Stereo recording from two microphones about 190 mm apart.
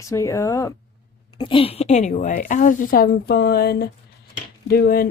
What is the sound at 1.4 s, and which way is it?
A woman's voice, 30° left (ahead or behind).